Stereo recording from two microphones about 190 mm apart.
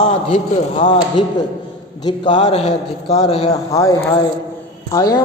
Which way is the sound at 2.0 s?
25° left (ahead or behind).